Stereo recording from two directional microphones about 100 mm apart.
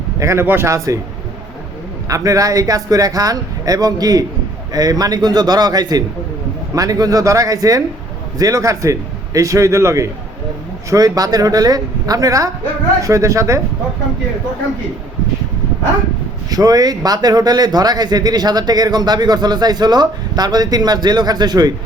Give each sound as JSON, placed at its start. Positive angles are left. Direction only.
{"t": 0.2, "sound": "speech", "side_deg": -30}
{"t": 2.0, "sound": "speech", "side_deg": -35}
{"t": 16.5, "sound": "speech", "side_deg": -40}